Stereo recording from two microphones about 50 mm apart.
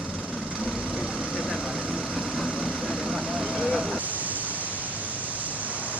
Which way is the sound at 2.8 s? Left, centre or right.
Centre.